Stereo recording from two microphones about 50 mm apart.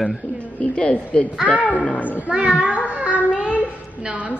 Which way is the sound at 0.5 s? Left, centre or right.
Left.